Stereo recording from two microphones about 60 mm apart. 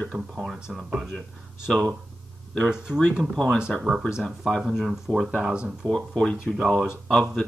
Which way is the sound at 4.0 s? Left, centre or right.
Centre.